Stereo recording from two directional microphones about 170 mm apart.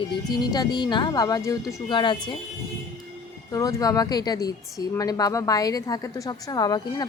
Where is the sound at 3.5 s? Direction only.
20° left (ahead or behind).